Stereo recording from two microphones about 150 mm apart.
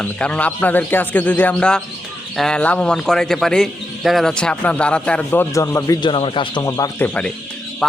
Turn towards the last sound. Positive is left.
turn(degrees=5)  # may be behind; listen again after turning